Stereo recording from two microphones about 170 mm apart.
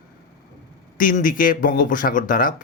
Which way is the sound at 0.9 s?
55° left (ahead or behind).